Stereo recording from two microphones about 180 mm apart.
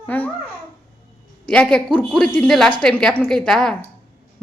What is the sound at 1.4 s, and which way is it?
A woman's voice, 5° left (ahead or behind).